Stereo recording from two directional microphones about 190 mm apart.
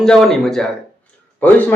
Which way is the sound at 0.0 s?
Centre (ahead or behind).